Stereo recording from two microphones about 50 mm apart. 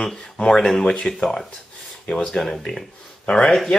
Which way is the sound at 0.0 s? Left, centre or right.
Centre.